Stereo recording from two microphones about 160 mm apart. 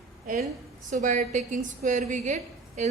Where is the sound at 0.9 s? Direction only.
50° right (ahead or behind).